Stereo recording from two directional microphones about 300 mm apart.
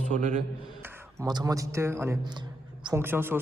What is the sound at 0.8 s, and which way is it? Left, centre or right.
A man's voice, centre.